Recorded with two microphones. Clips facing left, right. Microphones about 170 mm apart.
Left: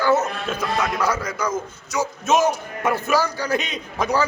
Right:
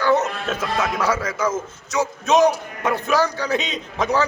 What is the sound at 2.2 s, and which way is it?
Speech, 15° right (ahead or behind).